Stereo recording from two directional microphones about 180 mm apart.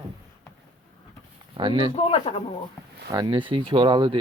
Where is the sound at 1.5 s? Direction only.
25° right (ahead or behind).